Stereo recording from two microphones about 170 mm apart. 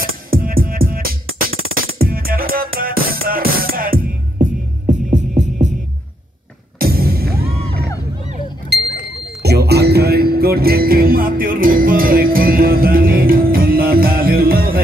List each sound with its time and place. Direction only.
0.0 s music: 60° right (ahead or behind)
6.8 s music: 60° right (ahead or behind)
9.4 s music: 75° right (ahead or behind)